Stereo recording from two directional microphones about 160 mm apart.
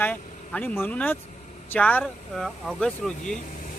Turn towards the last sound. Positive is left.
turn(degrees=5)  # may be behind; listen again after turning